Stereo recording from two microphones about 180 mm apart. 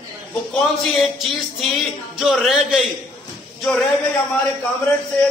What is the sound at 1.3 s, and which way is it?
A man's voice, centre (ahead or behind).